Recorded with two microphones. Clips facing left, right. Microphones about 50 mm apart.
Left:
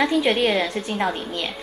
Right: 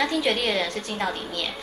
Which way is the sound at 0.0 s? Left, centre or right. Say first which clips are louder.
Left 4 dB; centre.